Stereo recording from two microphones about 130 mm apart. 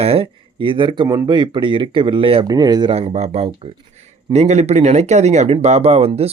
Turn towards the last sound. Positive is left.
turn(degrees=-50)  # may be behind; listen again after turning